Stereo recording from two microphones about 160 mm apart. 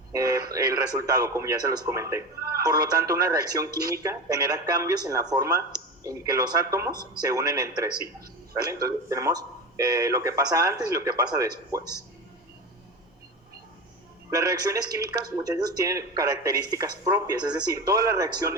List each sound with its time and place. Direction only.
0.1 s a sound: 20° right (ahead or behind)
0.5 s speech: 20° right (ahead or behind)
14.3 s speech: 20° right (ahead or behind)